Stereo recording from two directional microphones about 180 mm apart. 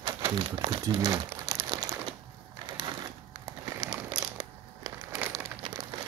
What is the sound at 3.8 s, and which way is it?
Crumpling, 20° right (ahead or behind).